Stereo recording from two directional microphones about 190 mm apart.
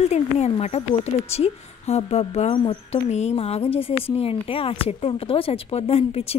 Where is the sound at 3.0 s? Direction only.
35° left (ahead or behind).